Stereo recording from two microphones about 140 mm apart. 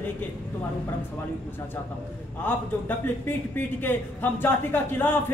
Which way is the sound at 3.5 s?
15° left (ahead or behind).